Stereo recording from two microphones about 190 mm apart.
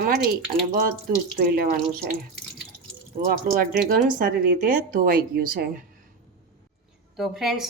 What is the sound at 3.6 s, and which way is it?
Speech, 50° right (ahead or behind).